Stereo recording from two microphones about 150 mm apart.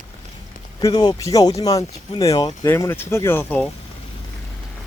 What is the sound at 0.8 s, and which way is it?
Speech, 25° left (ahead or behind).